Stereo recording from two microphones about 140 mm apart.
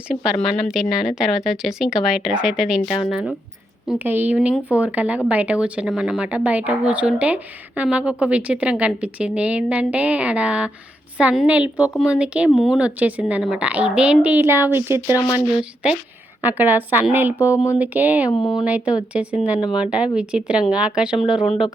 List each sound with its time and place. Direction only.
0.7 s speech: 5° right (ahead or behind)
3.9 s a woman's voice: 15° right (ahead or behind)
16.4 s a woman's voice: 15° right (ahead or behind)
17.3 s speech: 20° left (ahead or behind)
17.7 s a woman's voice: 10° right (ahead or behind)
18.3 s speech: 40° left (ahead or behind)
18.6 s a woman's voice: 10° right (ahead or behind)